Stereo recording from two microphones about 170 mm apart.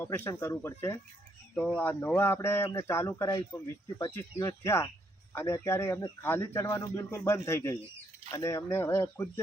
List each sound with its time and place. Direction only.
0.0 s a man's voice: 15° left (ahead or behind)